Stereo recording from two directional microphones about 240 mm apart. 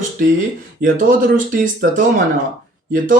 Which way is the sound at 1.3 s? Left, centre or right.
Right.